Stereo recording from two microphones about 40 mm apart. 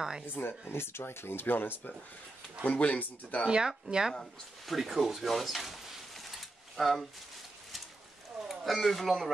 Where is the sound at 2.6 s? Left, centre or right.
Left.